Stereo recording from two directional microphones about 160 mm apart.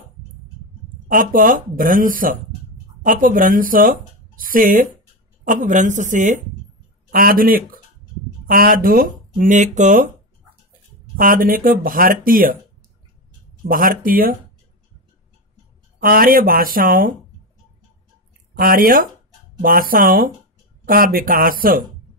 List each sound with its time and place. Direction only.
1.0 s speech: 60° right (ahead or behind)
11.1 s speech: 60° right (ahead or behind)
13.7 s speech: 60° right (ahead or behind)
16.0 s speech: 65° right (ahead or behind)
18.6 s speech: 60° right (ahead or behind)